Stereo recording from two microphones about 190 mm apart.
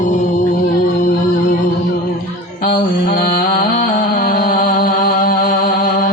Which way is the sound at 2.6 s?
50° left (ahead or behind).